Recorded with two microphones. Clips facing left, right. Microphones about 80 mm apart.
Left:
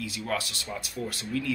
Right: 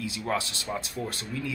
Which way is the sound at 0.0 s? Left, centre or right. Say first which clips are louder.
Right 2 dB; right.